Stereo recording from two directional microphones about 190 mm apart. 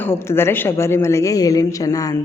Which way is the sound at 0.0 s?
10° left (ahead or behind).